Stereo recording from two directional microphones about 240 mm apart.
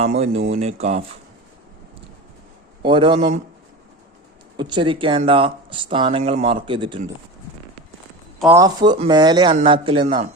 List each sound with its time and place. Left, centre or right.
0.0 s speech: right
2.8 s speech: centre
4.5 s speech: centre
8.4 s speech: centre